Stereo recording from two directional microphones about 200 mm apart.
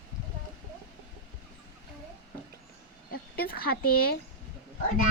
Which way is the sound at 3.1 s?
50° left (ahead or behind).